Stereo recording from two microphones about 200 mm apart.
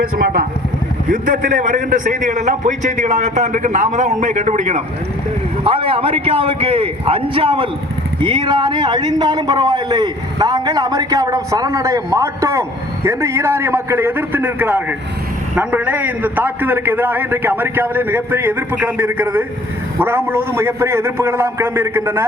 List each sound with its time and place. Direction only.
1.1 s a man's voice: 40° right (ahead or behind); by 22.3 s 15° right (ahead or behind)